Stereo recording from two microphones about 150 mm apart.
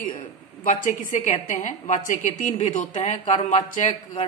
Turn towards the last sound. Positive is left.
turn(degrees=50)  # may be behind; listen again after turning